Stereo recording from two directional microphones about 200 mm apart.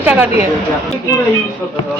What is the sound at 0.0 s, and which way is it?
Speech, 10° right (ahead or behind).